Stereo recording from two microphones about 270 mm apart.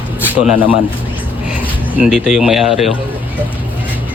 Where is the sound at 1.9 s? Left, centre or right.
Centre.